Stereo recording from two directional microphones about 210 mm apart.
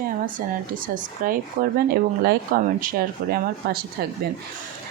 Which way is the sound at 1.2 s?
40° right (ahead or behind).